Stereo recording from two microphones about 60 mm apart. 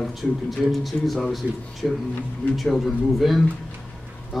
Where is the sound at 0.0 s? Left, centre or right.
Centre.